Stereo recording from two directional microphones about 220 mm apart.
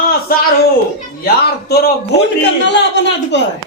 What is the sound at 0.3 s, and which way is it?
A man's voice, 40° left (ahead or behind).